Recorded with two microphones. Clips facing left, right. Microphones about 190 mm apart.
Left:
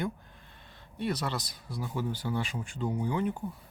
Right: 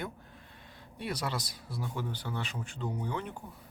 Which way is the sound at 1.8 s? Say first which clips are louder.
Left 4 dB; 5° left (ahead or behind).